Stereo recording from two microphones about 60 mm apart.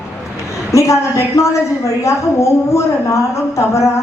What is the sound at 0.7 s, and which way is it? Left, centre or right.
A woman's voice, left.